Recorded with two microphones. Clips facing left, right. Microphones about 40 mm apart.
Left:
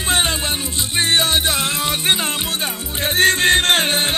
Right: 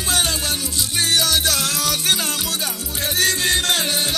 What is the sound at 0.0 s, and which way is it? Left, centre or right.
Music, left.